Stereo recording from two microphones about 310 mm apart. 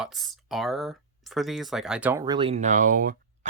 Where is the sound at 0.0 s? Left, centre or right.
Centre.